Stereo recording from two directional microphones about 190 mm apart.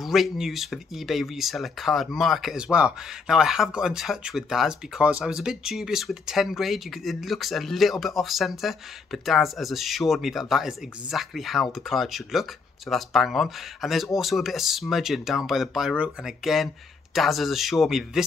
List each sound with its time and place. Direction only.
0.0 s speech: centre (ahead or behind)